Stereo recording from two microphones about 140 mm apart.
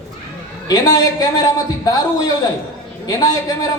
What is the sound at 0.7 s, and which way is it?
A man's voice, 25° left (ahead or behind).